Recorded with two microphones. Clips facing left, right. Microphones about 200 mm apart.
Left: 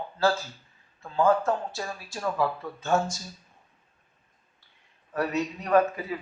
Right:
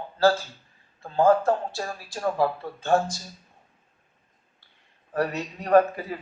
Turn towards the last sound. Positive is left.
turn(degrees=-35)  # may be behind; listen again after turning